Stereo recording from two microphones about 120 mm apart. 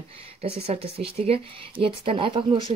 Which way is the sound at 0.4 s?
55° right (ahead or behind).